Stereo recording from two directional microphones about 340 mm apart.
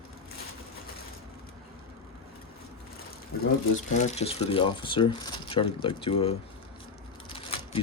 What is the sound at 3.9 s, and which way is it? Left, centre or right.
Speech, centre.